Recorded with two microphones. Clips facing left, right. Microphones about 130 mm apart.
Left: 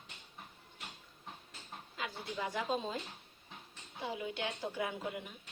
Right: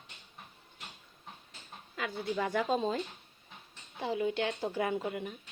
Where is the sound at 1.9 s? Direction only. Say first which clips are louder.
Right 7 dB; 60° right (ahead or behind).